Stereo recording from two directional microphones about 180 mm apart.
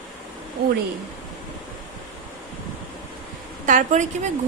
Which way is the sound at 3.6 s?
45° right (ahead or behind).